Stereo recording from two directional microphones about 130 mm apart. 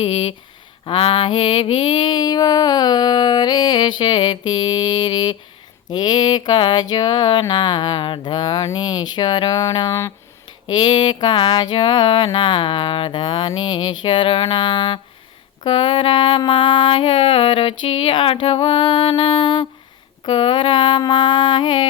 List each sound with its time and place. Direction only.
0.0 s speech: 40° left (ahead or behind)
0.9 s mantra: 40° left (ahead or behind)